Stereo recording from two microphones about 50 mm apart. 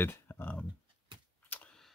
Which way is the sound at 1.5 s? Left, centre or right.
Left.